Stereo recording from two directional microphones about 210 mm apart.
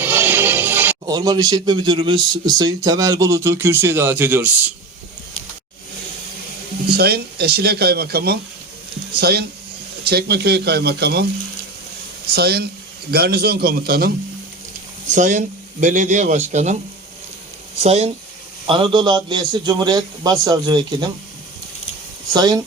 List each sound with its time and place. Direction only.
0.0 s speech: 10° right (ahead or behind)
6.9 s speech: 50° right (ahead or behind)
12.3 s speech: 50° right (ahead or behind)
15.1 s a man's voice: 35° right (ahead or behind)
17.8 s a man's voice: 30° right (ahead or behind)
22.3 s a man's voice: 20° right (ahead or behind)